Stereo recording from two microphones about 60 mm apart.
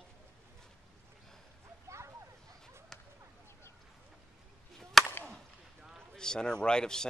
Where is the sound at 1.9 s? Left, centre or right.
Right.